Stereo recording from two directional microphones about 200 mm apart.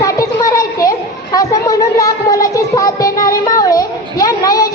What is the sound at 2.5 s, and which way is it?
Child singing, 15° left (ahead or behind).